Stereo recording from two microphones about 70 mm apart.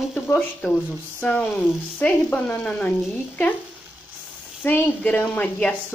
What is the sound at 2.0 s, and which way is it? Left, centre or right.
Speech, centre.